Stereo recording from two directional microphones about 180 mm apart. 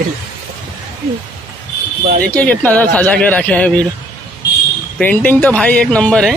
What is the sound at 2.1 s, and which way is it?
Speech, 55° right (ahead or behind).